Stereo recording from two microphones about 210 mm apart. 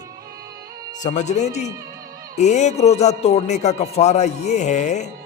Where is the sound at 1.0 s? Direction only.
35° left (ahead or behind).